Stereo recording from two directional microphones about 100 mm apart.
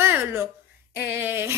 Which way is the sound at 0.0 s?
25° right (ahead or behind).